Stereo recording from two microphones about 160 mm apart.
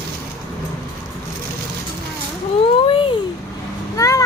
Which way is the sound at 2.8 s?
35° left (ahead or behind).